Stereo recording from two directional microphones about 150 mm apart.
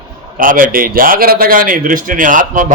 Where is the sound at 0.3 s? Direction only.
70° right (ahead or behind).